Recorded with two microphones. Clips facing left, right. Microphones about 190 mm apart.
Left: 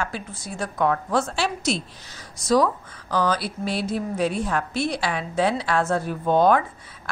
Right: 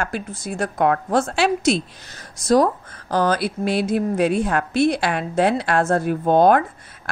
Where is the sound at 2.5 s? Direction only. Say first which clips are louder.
Right 3 dB; 50° right (ahead or behind).